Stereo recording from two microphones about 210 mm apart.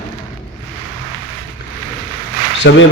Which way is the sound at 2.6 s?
55° left (ahead or behind).